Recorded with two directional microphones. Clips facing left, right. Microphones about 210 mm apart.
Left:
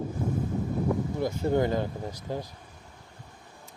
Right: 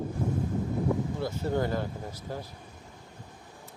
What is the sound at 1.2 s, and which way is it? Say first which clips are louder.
Speech: left 4 dB; 15° left (ahead or behind).